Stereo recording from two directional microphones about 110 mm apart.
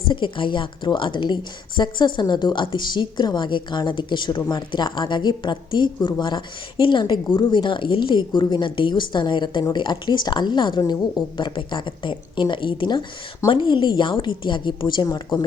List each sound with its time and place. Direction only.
0.1 s a woman's voice: 50° left (ahead or behind)